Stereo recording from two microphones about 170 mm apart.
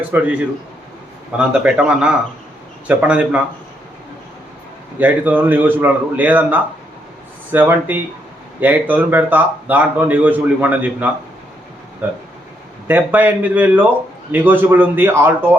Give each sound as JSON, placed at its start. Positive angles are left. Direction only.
{"t": 0.1, "sound": "speech", "side_deg": -10}
{"t": 1.4, "sound": "speech", "side_deg": -5}
{"t": 4.9, "sound": "speech", "side_deg": -10}
{"t": 12.9, "sound": "speech", "side_deg": -10}